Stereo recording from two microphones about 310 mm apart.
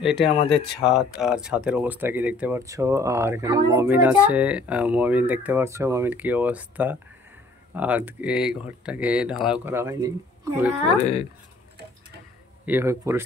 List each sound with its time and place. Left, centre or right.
0.0 s speech: centre
11.0 s speech: centre
12.6 s speech: centre